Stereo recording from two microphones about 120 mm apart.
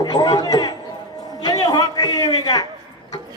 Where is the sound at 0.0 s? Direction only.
35° left (ahead or behind).